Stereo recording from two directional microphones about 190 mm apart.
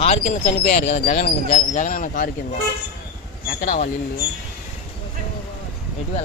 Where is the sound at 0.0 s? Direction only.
35° left (ahead or behind).